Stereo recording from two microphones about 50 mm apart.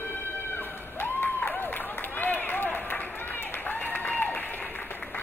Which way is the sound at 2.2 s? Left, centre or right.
Left.